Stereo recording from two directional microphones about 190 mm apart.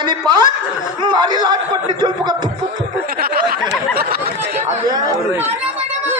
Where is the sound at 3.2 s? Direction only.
50° right (ahead or behind).